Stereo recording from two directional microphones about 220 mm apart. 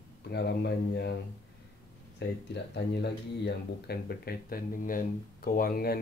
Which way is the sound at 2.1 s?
50° left (ahead or behind).